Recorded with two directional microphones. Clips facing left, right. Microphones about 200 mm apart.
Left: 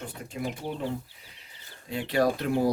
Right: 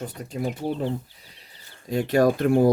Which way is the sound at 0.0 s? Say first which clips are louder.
Right 5 dB; 40° right (ahead or behind).